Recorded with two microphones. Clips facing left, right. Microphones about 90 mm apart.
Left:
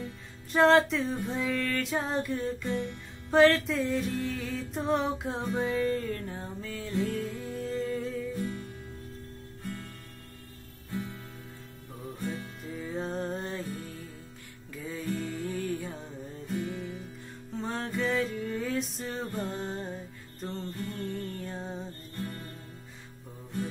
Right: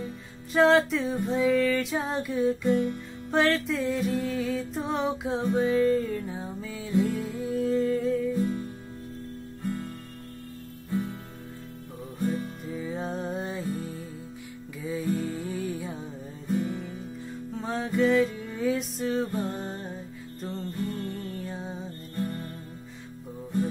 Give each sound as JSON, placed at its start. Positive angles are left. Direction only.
{"t": 0.0, "sound": "music", "side_deg": 0}
{"t": 10.9, "sound": "music", "side_deg": -20}
{"t": 12.7, "sound": "music", "side_deg": 0}
{"t": 17.6, "sound": "music", "side_deg": -5}